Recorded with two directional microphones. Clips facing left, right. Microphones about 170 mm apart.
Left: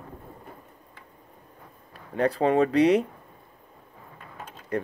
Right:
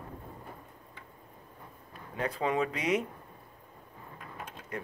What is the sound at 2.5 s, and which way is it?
Speech, 35° left (ahead or behind).